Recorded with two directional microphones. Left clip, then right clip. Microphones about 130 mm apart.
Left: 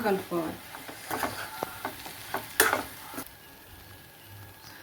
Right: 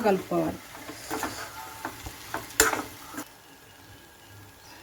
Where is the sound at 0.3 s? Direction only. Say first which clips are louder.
Right 4 dB; 40° right (ahead or behind).